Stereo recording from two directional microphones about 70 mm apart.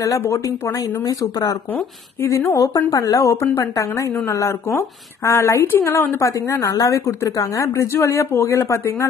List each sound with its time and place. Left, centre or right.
0.2 s speech: left
1.0 s speech: left